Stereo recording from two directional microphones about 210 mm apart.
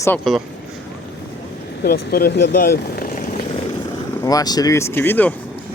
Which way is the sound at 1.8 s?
45° left (ahead or behind).